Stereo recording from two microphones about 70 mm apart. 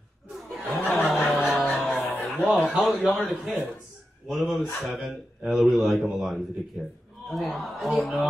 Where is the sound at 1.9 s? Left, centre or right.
Left.